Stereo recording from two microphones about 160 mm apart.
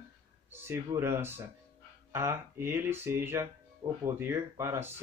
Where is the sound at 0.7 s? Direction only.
15° right (ahead or behind).